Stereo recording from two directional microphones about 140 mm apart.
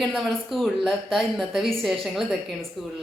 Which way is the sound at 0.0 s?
5° left (ahead or behind).